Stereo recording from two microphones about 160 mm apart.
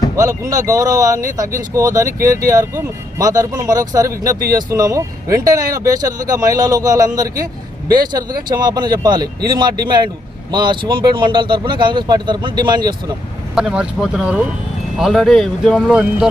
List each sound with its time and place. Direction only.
0.2 s speech: 20° right (ahead or behind)
8.4 s speech: 25° right (ahead or behind)
13.6 s speech: 5° right (ahead or behind)